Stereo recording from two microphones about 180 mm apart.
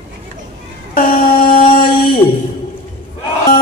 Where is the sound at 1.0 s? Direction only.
50° left (ahead or behind).